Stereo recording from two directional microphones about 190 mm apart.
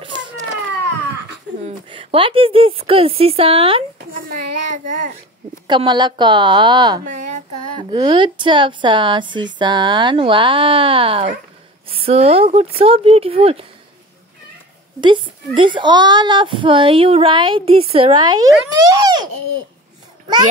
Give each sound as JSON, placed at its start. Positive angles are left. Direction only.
{"t": 1.6, "sound": "a child's voice", "side_deg": -30}
{"t": 4.1, "sound": "a child's voice", "side_deg": -45}
{"t": 5.7, "sound": "a child's voice", "side_deg": -25}
{"t": 15.0, "sound": "a child's voice", "side_deg": -25}